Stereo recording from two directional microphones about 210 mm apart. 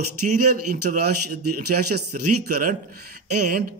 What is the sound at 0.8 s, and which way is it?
A man's voice, 45° right (ahead or behind).